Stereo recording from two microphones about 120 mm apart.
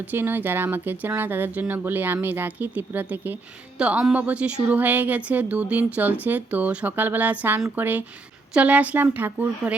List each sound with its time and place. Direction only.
0.0 s speech: 15° right (ahead or behind)